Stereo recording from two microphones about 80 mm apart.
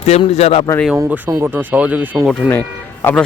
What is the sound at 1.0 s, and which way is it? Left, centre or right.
Speech, right.